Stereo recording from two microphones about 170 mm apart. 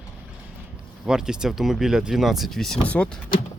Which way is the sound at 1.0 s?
5° right (ahead or behind).